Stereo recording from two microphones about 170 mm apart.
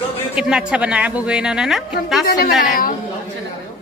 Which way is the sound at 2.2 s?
60° left (ahead or behind).